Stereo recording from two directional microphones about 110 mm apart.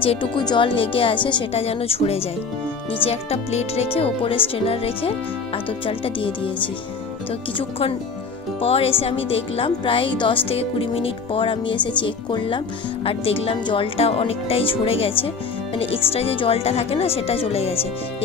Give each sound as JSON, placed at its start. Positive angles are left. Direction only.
{"t": 0.0, "sound": "speech", "side_deg": 55}
{"t": 0.4, "sound": "speech", "side_deg": 45}
{"t": 8.5, "sound": "speech", "side_deg": 65}